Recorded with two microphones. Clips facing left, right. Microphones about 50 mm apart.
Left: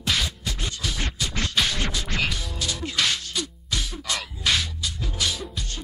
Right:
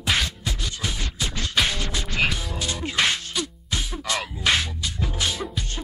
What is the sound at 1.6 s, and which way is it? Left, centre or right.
Music, centre.